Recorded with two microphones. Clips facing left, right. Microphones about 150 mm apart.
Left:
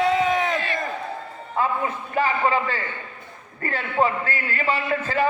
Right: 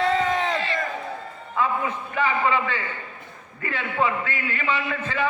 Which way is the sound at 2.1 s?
40° left (ahead or behind).